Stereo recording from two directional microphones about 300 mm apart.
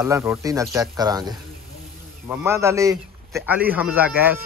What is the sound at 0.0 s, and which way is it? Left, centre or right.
A man's voice, centre.